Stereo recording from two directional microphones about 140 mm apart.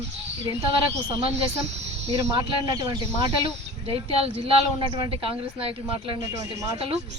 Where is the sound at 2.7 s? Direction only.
30° right (ahead or behind).